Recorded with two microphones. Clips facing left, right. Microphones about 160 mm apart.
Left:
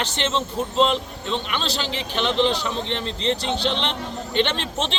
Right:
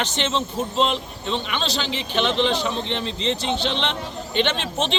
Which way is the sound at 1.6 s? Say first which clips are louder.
Right 1 dB; 40° left (ahead or behind).